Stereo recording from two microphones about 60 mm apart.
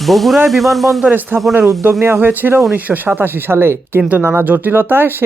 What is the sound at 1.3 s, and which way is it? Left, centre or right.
Speech, right.